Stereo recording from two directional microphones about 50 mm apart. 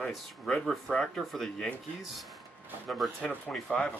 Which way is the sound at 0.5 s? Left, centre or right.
Centre.